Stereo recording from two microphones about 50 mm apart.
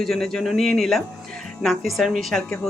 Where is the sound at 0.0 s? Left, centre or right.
Centre.